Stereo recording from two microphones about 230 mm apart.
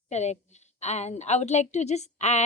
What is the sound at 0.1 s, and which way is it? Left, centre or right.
A woman's voice, left.